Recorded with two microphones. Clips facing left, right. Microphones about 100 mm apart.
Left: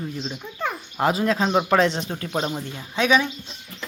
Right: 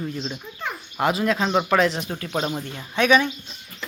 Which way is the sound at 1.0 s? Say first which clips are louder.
Left 1 dB; 35° left (ahead or behind).